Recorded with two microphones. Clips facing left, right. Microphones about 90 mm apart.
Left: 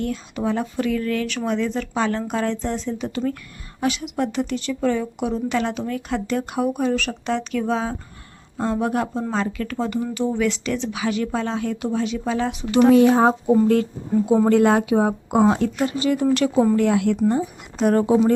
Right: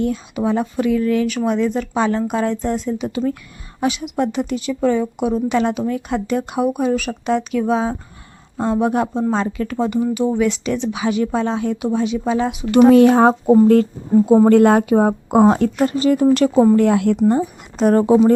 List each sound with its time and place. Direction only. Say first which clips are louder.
0.0 s speech: right 5 dB; 20° right (ahead or behind)
12.9 s speech: right 3 dB; 60° right (ahead or behind)
14.3 s a woman's voice: right 4 dB; 45° right (ahead or behind)